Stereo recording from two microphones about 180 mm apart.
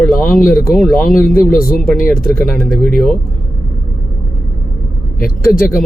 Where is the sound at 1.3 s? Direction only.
55° left (ahead or behind).